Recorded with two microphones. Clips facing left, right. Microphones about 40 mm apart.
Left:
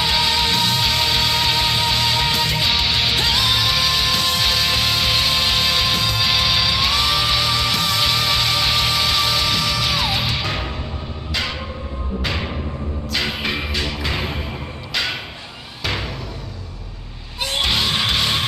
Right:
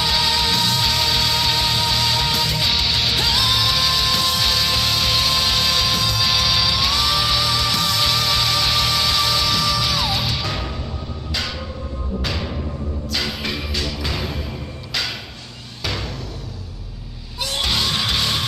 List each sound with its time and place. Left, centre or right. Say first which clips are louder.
0.0 s music: left 1 dB; centre
12.3 s music: left 3 dB; left
17.4 s music: left 2 dB; left